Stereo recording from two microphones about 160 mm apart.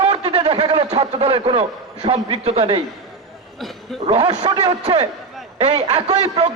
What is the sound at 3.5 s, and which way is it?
Speech, centre (ahead or behind).